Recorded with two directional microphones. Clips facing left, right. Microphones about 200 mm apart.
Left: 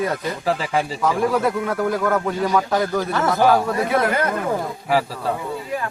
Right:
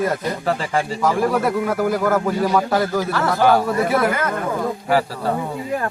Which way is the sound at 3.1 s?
20° left (ahead or behind).